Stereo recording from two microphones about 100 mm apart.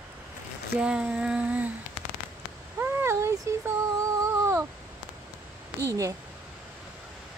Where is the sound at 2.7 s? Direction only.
25° right (ahead or behind).